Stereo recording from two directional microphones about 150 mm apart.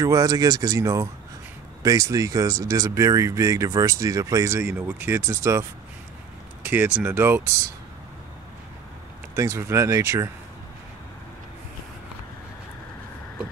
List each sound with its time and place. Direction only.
0.0 s speech: 25° right (ahead or behind)
9.3 s speech: 20° right (ahead or behind)